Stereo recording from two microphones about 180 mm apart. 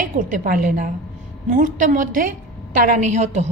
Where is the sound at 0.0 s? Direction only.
50° right (ahead or behind).